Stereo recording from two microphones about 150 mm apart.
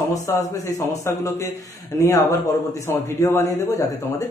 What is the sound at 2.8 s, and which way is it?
A man's voice, 15° left (ahead or behind).